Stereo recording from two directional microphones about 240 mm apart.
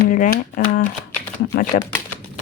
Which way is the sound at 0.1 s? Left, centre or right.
Left.